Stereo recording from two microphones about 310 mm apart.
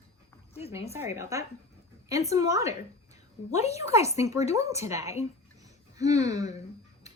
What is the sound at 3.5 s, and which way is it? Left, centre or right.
Speech, left.